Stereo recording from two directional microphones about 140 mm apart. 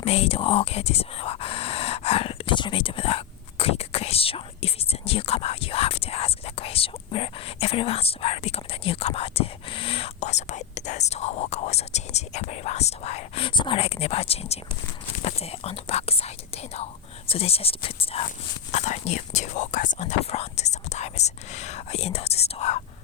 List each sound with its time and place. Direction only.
0.0 s speech: 45° left (ahead or behind)
18.7 s speech: 55° left (ahead or behind)